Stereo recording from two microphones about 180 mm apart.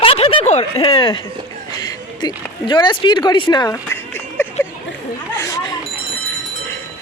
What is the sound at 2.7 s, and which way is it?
Speech, 25° left (ahead or behind).